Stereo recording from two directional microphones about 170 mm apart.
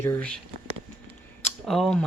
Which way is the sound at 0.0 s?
10° left (ahead or behind).